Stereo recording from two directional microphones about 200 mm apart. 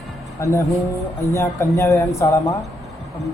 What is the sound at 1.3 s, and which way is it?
Speech, 15° left (ahead or behind).